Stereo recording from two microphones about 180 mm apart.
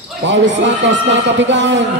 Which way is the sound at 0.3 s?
90° right.